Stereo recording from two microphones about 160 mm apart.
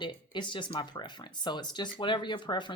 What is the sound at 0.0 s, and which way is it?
Speech, 30° left (ahead or behind).